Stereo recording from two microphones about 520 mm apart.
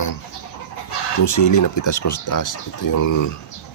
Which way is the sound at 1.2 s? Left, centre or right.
Left.